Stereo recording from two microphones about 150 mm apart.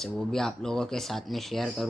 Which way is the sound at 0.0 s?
5° left (ahead or behind).